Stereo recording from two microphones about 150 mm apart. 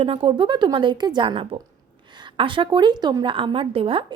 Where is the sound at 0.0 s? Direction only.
35° right (ahead or behind).